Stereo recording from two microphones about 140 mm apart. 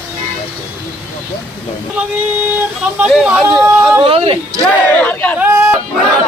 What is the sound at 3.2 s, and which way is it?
Speech, 5° right (ahead or behind).